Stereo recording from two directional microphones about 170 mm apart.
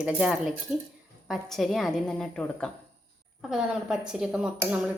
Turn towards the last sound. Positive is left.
turn(degrees=-5)  # may be behind; listen again after turning